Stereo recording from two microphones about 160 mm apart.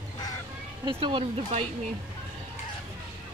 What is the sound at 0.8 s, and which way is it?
Speech, 30° right (ahead or behind).